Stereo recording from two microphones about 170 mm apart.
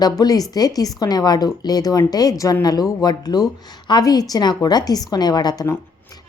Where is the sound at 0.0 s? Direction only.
20° left (ahead or behind).